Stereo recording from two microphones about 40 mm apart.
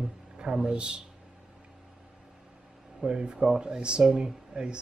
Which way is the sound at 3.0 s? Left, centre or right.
Right.